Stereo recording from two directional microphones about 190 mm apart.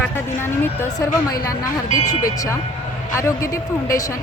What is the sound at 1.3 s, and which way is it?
Speech, 20° left (ahead or behind).